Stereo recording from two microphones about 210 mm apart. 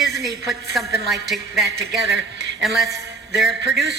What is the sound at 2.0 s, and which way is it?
Speech, 55° right (ahead or behind).